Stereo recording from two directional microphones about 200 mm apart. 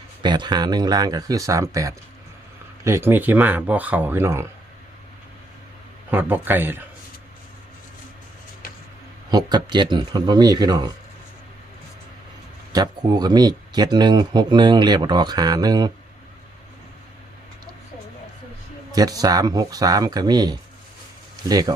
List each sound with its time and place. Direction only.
0.2 s speech: 20° right (ahead or behind)
6.1 s speech: 10° right (ahead or behind)
9.3 s speech: 20° right (ahead or behind)
12.7 s speech: 20° right (ahead or behind)
18.9 s speech: 20° right (ahead or behind)